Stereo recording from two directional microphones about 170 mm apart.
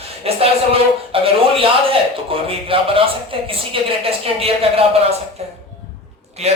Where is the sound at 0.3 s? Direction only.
35° right (ahead or behind).